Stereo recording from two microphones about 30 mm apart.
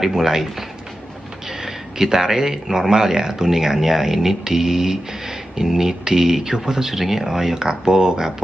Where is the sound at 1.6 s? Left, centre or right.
Centre.